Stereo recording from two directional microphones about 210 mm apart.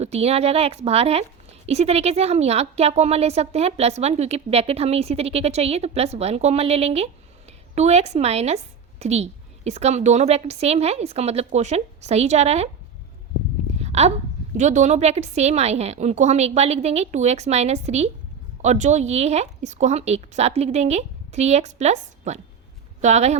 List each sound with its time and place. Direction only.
0.0 s a woman's voice: 30° right (ahead or behind)
13.7 s a sound: 30° right (ahead or behind)
14.5 s a woman's voice: 35° right (ahead or behind)